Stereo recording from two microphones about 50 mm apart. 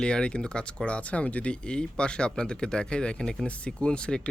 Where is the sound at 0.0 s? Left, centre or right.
Centre.